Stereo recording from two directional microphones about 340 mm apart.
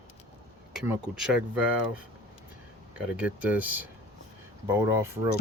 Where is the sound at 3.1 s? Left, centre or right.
Centre.